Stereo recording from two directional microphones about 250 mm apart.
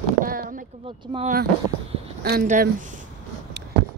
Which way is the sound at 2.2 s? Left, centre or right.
Right.